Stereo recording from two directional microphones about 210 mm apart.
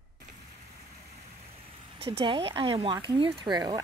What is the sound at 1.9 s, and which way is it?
Speech, 25° right (ahead or behind).